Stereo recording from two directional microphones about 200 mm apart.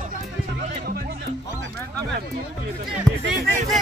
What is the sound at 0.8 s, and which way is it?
Music, 50° right (ahead or behind).